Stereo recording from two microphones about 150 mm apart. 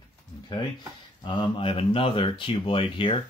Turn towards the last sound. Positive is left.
turn(degrees=35)  # may be behind; listen again after turning